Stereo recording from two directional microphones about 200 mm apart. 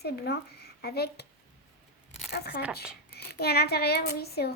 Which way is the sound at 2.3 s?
50° left (ahead or behind).